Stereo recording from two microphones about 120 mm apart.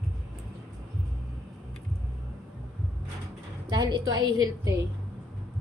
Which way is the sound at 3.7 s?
40° right (ahead or behind).